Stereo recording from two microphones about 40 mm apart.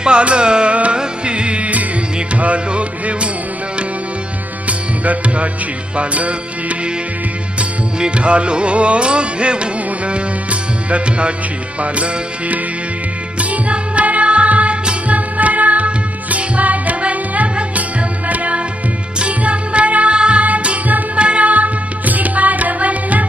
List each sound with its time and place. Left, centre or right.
0.0 s music: right
6.0 s music: right
20.4 s music: right